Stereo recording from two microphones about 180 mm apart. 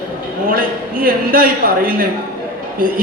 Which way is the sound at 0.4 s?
55° right (ahead or behind).